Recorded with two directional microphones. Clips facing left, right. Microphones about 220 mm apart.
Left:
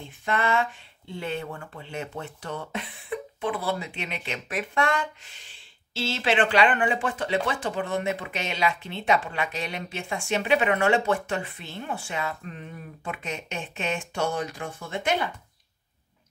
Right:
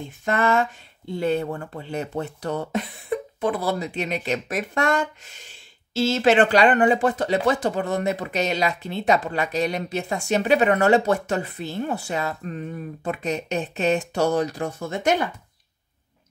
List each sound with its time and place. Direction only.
0.2 s speech: 45° right (ahead or behind)